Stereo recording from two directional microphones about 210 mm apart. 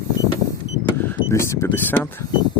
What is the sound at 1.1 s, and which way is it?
Speech, 15° left (ahead or behind).